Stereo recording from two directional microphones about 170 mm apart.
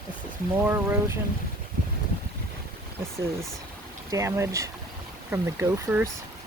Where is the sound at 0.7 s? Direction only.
15° right (ahead or behind).